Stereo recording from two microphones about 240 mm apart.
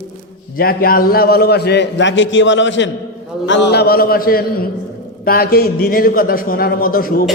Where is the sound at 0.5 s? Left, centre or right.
Left.